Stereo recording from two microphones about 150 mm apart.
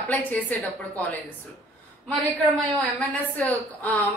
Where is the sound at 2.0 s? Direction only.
10° left (ahead or behind).